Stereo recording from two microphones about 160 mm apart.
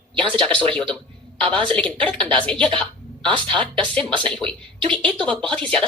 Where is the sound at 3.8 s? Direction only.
5° left (ahead or behind).